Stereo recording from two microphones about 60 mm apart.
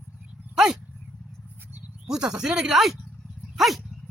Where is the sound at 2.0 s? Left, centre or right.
Centre.